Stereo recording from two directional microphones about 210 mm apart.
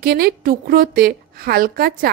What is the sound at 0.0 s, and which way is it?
A woman's voice, 45° right (ahead or behind).